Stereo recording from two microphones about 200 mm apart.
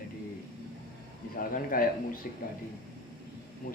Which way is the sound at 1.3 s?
45° left (ahead or behind).